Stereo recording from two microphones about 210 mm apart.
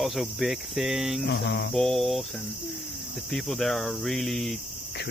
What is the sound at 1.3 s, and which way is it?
Cricket, 55° left (ahead or behind).